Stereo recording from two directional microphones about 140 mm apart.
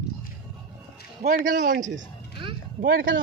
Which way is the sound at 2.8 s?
90° right.